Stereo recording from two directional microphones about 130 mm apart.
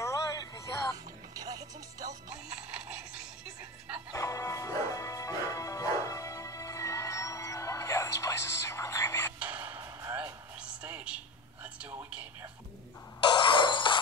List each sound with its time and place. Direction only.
0.0 s music: 25° left (ahead or behind)
1.3 s music: 30° right (ahead or behind)
4.1 s music: 25° left (ahead or behind)
9.4 s a sound: 10° right (ahead or behind)
13.2 s shatter: 35° left (ahead or behind)